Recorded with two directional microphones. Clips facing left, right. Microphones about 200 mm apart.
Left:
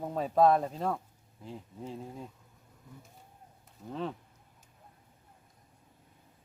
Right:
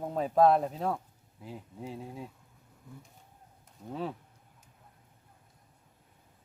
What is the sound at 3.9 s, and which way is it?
Speech, 5° right (ahead or behind).